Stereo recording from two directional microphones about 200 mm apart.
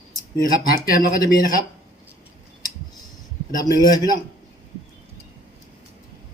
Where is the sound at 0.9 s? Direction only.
45° left (ahead or behind).